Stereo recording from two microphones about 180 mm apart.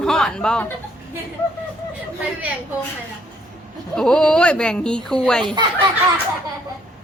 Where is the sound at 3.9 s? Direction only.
5° left (ahead or behind).